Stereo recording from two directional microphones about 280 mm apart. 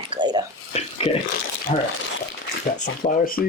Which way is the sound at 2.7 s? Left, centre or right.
Left.